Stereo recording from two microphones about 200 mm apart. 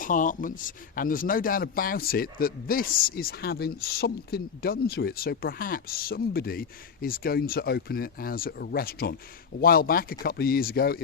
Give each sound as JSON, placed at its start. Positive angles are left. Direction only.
{"t": 0.0, "sound": "speech", "side_deg": 40}